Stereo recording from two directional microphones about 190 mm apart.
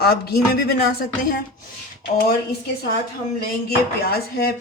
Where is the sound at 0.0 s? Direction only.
55° left (ahead or behind).